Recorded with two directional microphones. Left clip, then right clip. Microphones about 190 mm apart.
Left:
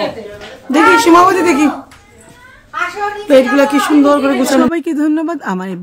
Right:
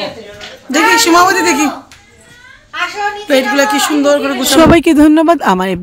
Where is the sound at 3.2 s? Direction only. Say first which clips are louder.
Left 2 dB; centre (ahead or behind).